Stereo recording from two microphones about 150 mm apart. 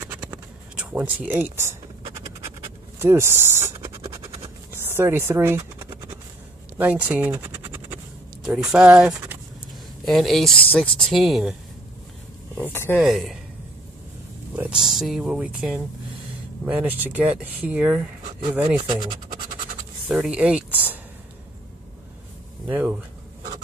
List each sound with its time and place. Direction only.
0.0 s scratch: 10° right (ahead or behind)
0.7 s speech: 10° right (ahead or behind)
3.0 s speech: 15° right (ahead or behind)
4.2 s scratch: 20° right (ahead or behind)
6.8 s scratch: 10° right (ahead or behind)
8.5 s speech: 5° right (ahead or behind)
12.6 s speech: 15° left (ahead or behind)
12.9 s speech: centre (ahead or behind)
14.5 s speech: 10° right (ahead or behind)
18.8 s speech: 30° right (ahead or behind)
20.1 s speech: 10° right (ahead or behind)
22.7 s speech: 10° right (ahead or behind)